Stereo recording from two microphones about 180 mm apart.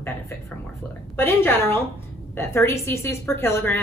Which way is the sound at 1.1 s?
10° left (ahead or behind).